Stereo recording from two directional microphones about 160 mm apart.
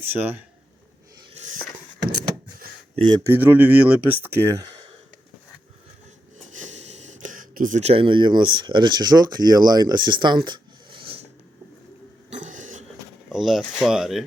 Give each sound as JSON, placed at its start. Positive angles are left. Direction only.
{"t": 0.0, "sound": "speech", "side_deg": -15}
{"t": 1.3, "sound": "a sound", "side_deg": -45}
{"t": 3.2, "sound": "speech", "side_deg": -10}
{"t": 7.3, "sound": "speech", "side_deg": -55}
{"t": 12.4, "sound": "a sound", "side_deg": -50}
{"t": 13.3, "sound": "speech", "side_deg": 0}